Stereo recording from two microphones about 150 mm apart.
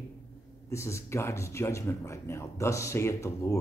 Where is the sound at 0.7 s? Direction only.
20° left (ahead or behind).